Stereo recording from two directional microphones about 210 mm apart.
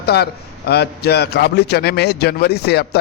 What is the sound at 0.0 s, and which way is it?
A man's voice, 50° left (ahead or behind).